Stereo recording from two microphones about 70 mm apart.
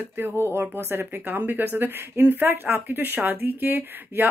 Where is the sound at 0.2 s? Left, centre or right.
Right.